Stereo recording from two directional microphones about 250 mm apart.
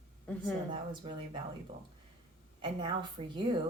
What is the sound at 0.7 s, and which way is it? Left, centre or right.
Speech, centre.